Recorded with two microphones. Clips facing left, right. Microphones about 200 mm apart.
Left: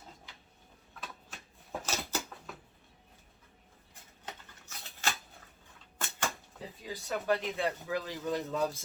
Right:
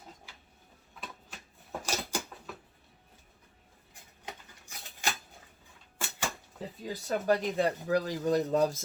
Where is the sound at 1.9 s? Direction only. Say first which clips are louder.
Right 2 dB; 15° right (ahead or behind).